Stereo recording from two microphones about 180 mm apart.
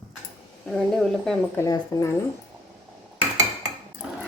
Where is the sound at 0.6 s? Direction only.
Centre (ahead or behind).